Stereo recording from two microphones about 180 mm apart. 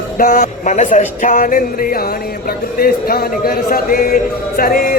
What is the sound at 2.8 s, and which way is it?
A man's voice, 55° left (ahead or behind).